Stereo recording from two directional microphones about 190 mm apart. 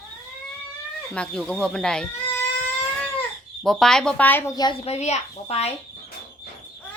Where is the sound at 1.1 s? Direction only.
5° left (ahead or behind).